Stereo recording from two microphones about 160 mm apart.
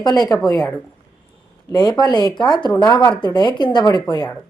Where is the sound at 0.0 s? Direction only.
25° left (ahead or behind).